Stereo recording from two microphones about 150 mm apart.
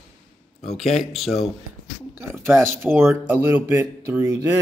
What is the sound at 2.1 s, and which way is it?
Speech, 15° right (ahead or behind).